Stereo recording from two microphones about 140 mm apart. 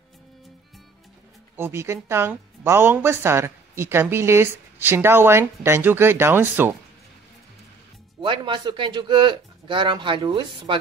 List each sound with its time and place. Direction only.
1.6 s a woman's voice: 20° right (ahead or behind)
8.2 s speech: 35° right (ahead or behind)